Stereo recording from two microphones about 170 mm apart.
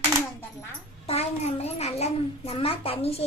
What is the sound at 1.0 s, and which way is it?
A child's voice, 35° left (ahead or behind).